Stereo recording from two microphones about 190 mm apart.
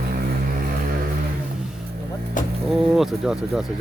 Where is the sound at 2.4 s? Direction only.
45° left (ahead or behind).